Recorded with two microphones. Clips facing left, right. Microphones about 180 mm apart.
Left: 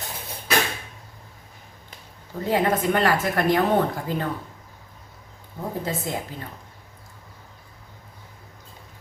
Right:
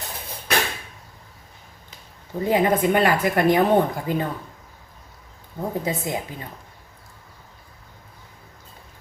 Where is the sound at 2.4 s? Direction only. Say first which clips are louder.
Right 3 dB; 15° right (ahead or behind).